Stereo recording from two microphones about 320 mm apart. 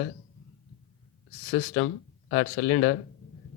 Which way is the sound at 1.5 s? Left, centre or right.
Left.